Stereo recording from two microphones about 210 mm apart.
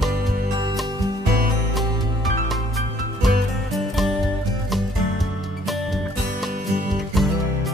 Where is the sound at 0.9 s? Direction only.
20° right (ahead or behind).